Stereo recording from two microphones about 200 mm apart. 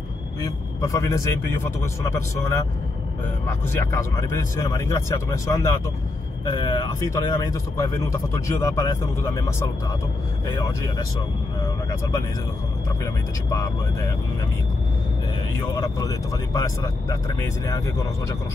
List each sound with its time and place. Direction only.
0.4 s speech: 15° left (ahead or behind)
13.0 s speech: 15° left (ahead or behind)
15.8 s speech: 15° left (ahead or behind)